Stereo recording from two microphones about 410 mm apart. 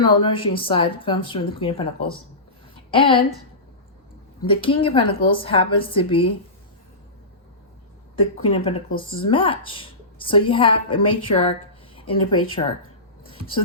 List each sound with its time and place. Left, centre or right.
0.2 s a woman's voice: centre
4.4 s a woman's voice: centre
8.1 s a woman's voice: centre